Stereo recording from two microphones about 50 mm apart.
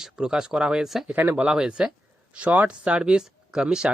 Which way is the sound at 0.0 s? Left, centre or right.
Centre.